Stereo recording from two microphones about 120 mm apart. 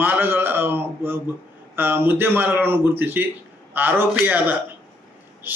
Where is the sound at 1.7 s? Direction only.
15° right (ahead or behind).